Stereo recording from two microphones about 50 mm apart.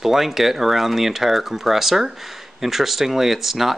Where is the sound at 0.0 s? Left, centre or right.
Centre.